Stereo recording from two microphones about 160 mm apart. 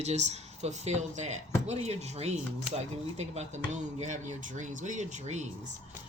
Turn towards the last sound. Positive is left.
turn(degrees=-45)  # may be behind; listen again after turning